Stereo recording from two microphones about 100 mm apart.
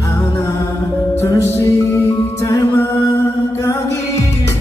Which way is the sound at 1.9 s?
35° left (ahead or behind).